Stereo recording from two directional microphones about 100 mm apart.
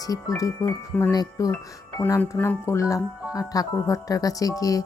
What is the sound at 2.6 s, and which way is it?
Speech, 30° left (ahead or behind).